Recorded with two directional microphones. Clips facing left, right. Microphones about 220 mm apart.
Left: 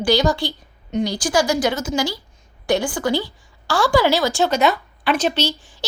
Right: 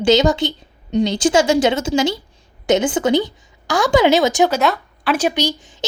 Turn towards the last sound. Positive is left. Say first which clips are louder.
# right 2 dB
turn(degrees=-15)  # may be behind; listen again after turning